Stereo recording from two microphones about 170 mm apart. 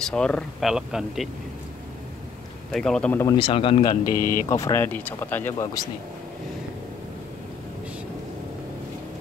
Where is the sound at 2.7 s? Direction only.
5° left (ahead or behind).